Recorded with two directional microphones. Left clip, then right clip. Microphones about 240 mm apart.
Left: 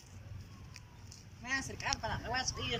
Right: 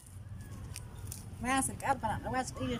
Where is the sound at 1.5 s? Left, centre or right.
Right.